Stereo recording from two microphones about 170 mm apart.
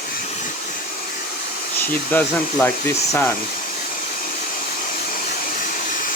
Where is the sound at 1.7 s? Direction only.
10° left (ahead or behind).